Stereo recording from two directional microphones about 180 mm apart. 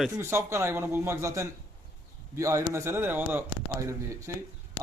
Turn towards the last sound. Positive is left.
turn(degrees=-15)  # may be behind; listen again after turning